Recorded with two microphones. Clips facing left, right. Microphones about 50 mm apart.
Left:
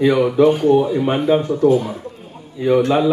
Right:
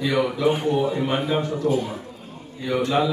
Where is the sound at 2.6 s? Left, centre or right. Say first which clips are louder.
Left 7 dB; left.